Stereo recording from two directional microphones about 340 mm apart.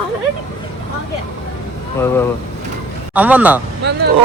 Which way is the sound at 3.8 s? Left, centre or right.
Right.